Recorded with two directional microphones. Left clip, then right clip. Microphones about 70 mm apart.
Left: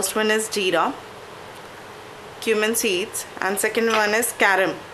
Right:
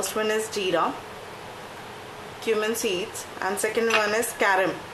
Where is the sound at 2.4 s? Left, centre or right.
Left.